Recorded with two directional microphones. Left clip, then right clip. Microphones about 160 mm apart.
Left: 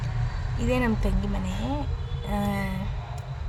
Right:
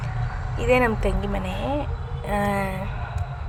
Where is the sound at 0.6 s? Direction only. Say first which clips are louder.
Right 7 dB; 20° right (ahead or behind).